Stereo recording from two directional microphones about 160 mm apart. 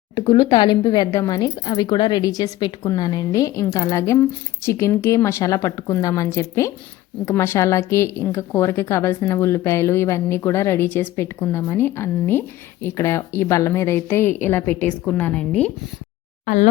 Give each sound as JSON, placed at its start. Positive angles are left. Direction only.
{"t": 0.3, "sound": "a woman's voice", "side_deg": 25}